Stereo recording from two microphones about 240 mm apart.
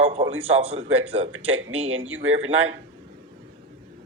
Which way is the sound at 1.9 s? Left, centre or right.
Right.